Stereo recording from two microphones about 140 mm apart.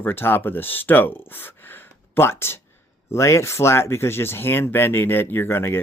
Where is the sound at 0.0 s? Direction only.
15° left (ahead or behind).